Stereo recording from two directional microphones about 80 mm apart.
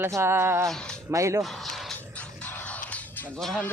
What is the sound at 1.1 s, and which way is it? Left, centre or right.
Speech, right.